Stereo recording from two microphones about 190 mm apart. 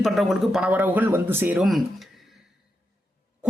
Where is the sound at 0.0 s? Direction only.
Centre (ahead or behind).